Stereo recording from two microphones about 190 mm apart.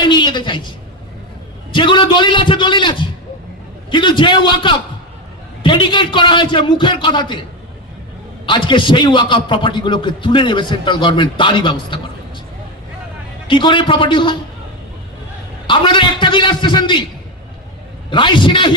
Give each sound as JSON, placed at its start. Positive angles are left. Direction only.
{"t": 0.0, "sound": "a sound", "side_deg": 25}
{"t": 1.7, "sound": "a man's voice", "side_deg": 25}
{"t": 3.9, "sound": "a man's voice", "side_deg": 25}
{"t": 8.4, "sound": "a man's voice", "side_deg": 25}
{"t": 13.5, "sound": "a man's voice", "side_deg": 25}
{"t": 15.6, "sound": "a man's voice", "side_deg": 25}
{"t": 18.1, "sound": "a man's voice", "side_deg": 25}